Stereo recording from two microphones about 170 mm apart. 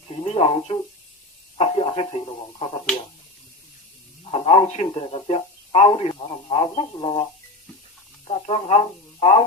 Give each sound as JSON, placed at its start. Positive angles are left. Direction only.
{"t": 0.3, "sound": "speech", "side_deg": 35}
{"t": 4.3, "sound": "speech", "side_deg": 35}
{"t": 8.3, "sound": "speech", "side_deg": 35}